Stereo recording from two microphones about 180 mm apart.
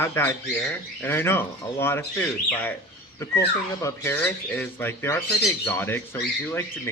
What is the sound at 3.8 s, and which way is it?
Speech, 15° left (ahead or behind).